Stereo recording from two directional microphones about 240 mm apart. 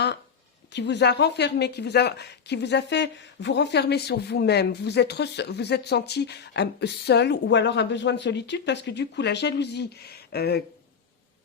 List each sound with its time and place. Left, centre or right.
0.7 s speech: left